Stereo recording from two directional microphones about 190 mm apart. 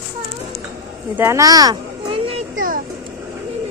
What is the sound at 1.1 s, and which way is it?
Speech, 15° right (ahead or behind).